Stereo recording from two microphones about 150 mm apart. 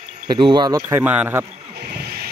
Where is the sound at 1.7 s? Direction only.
90° right.